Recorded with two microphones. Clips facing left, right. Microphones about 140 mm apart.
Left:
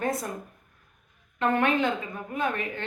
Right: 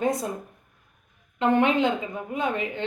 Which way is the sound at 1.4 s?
20° right (ahead or behind).